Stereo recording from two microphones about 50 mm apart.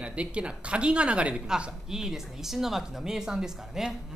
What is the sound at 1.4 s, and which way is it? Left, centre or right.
Speech, centre.